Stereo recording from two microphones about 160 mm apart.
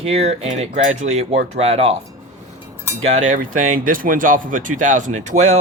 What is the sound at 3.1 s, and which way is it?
Speech, 50° right (ahead or behind).